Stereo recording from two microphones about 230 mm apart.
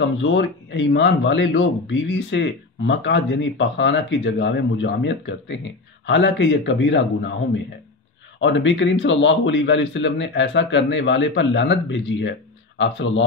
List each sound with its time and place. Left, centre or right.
0.0 s speech: left
8.4 s speech: left